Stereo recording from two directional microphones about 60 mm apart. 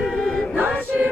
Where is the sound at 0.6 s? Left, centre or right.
Right.